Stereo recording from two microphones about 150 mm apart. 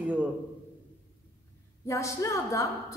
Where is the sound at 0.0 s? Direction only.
10° right (ahead or behind).